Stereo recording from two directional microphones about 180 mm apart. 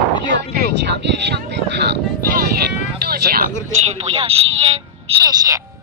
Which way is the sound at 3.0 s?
55° right (ahead or behind).